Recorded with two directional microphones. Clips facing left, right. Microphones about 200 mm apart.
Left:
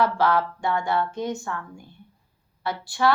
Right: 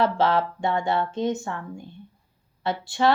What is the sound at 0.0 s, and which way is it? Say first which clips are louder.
Speech: even; 25° right (ahead or behind).